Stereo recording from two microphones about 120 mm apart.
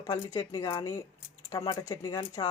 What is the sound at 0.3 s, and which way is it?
Dishes, 30° left (ahead or behind).